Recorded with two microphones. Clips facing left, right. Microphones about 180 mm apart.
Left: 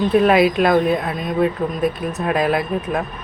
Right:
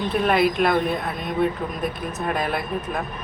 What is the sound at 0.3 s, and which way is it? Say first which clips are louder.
Speech: left 5 dB; 90° left.